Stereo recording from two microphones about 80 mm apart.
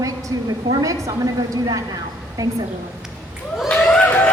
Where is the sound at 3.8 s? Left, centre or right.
Centre.